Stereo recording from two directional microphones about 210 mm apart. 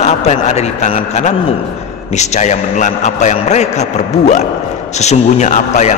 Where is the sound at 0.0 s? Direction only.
30° left (ahead or behind).